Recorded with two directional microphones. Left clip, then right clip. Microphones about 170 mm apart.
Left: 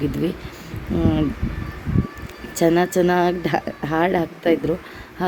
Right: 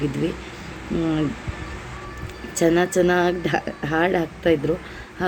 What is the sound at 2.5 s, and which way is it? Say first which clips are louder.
Speech: left 1 dB; 20° left (ahead or behind).